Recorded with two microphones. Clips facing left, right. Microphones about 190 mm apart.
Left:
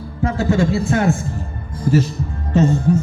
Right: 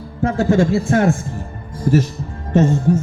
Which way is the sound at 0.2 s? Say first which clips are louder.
Right 2 dB; 50° right (ahead or behind).